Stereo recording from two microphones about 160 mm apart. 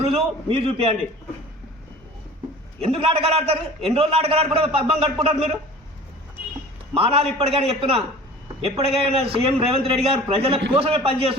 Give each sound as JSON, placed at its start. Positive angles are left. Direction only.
{"t": 0.0, "sound": "a man's voice", "side_deg": -35}
{"t": 2.8, "sound": "a man's voice", "side_deg": -35}
{"t": 6.9, "sound": "a man's voice", "side_deg": -35}